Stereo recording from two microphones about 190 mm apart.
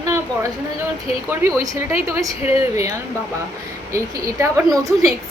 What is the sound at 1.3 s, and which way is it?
Speech, 15° right (ahead or behind).